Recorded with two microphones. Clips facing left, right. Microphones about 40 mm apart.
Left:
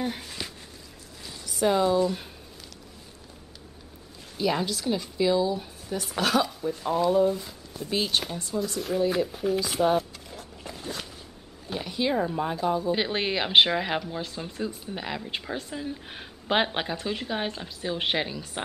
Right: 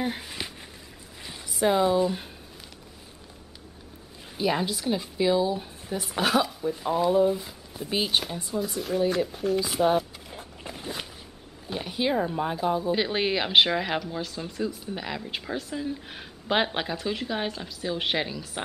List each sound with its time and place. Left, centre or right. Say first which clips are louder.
0.0 s a sound: right 1 dB; centre
1.5 s speech: even; centre
4.4 s speech: even; centre
10.3 s walk: right 1 dB; centre
11.6 s speech: even; centre
12.9 s speech: right 1 dB; centre